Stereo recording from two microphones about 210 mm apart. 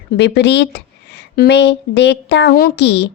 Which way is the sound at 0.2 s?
55° left (ahead or behind).